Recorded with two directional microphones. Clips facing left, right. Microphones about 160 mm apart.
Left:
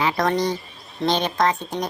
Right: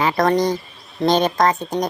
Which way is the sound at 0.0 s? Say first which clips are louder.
Right 4 dB; 45° right (ahead or behind).